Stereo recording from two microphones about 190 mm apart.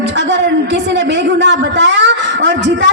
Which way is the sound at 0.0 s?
70° right (ahead or behind).